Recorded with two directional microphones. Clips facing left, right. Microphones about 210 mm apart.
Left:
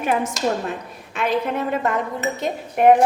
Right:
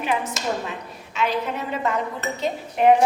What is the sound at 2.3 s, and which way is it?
Speech, 50° left (ahead or behind).